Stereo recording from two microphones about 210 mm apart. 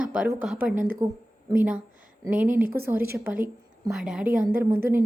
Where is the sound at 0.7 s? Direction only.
40° right (ahead or behind).